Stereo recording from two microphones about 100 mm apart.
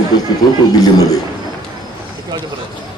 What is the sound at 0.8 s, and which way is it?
Speech, 40° left (ahead or behind).